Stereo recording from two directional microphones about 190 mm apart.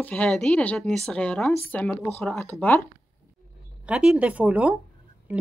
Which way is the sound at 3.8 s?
5° right (ahead or behind).